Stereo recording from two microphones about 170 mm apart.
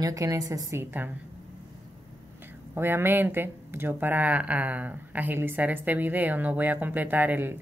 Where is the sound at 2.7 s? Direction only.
10° right (ahead or behind).